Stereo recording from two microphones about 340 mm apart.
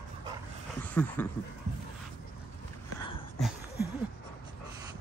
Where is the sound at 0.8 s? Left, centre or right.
Centre.